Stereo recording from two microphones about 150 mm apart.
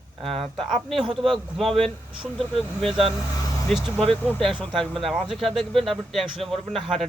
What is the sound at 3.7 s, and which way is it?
Speech, centre (ahead or behind).